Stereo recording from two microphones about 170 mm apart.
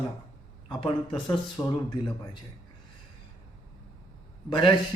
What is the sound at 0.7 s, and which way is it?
Speech, 30° left (ahead or behind).